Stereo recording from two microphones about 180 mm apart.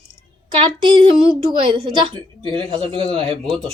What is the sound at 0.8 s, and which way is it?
Speech, 25° right (ahead or behind).